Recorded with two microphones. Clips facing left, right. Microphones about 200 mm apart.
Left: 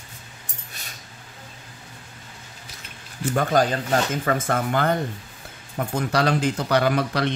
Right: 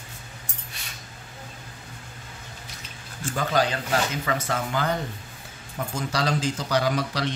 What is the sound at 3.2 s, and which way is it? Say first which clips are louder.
Speech: left 4 dB; 50° left (ahead or behind).